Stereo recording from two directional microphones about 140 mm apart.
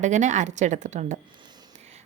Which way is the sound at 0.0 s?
60° right (ahead or behind).